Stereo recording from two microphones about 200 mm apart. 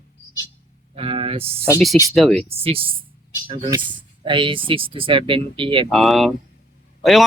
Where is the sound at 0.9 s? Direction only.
30° right (ahead or behind).